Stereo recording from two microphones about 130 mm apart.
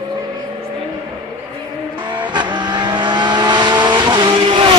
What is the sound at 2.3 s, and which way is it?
Vehicle, 35° right (ahead or behind).